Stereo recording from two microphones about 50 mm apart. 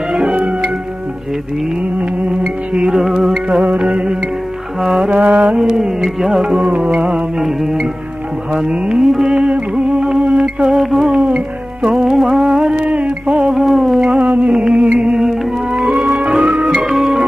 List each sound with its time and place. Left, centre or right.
0.1 s music: centre
2.0 s music: right
2.7 s music: centre
6.7 s music: right
6.9 s music: centre
13.5 s music: centre
14.0 s music: right; by 15.9 s centre
15.9 s music: right
16.3 s music: centre
16.9 s music: centre